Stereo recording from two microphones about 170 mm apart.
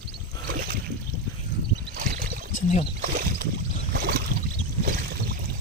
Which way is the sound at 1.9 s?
50° right (ahead or behind).